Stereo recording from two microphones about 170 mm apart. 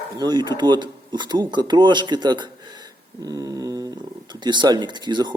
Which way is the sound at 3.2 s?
20° right (ahead or behind).